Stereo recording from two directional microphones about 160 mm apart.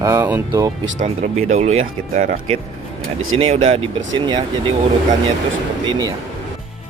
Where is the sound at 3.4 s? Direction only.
35° right (ahead or behind).